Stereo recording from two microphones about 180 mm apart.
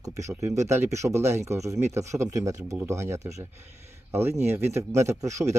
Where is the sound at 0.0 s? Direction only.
15° right (ahead or behind).